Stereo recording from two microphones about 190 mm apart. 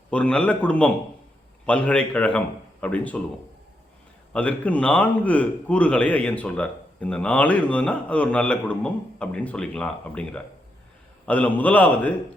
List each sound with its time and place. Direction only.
0.1 s a man's voice: 5° left (ahead or behind)
4.3 s a man's voice: 5° left (ahead or behind)